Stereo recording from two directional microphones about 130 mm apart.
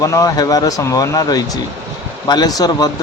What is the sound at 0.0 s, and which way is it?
Speech, 25° left (ahead or behind).